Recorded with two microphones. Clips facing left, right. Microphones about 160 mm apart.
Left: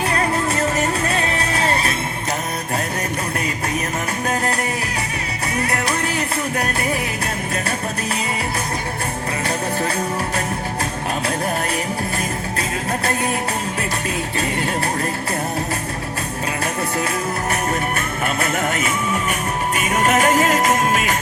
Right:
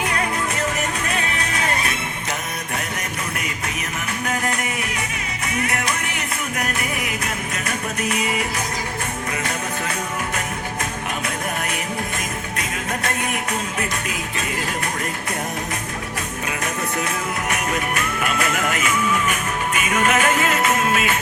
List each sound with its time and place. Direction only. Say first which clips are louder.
0.8 s music: left 4 dB; 30° left (ahead or behind)
4.3 s music: left 2 dB; 35° left (ahead or behind)
17.5 s music: left 1 dB; 30° left (ahead or behind)